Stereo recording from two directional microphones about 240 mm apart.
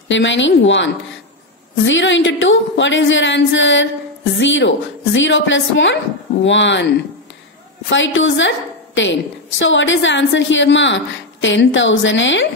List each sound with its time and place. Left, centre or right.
0.1 s speech: left
1.9 s speech: left
7.9 s a woman's voice: left